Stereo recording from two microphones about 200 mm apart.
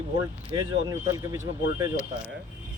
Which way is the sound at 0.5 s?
20° right (ahead or behind).